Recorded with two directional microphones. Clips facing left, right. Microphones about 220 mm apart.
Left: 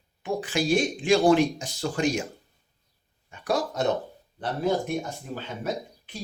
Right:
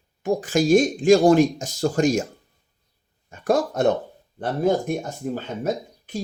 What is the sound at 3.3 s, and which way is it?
Speech, 50° right (ahead or behind).